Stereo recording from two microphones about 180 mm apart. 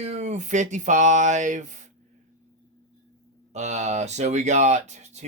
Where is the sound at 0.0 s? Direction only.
40° right (ahead or behind).